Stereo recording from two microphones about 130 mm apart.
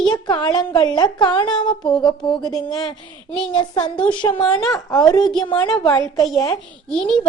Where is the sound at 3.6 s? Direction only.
35° left (ahead or behind).